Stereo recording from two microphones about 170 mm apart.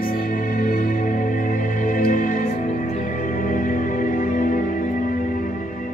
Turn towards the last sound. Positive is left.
turn(degrees=50)  # may be behind; listen again after turning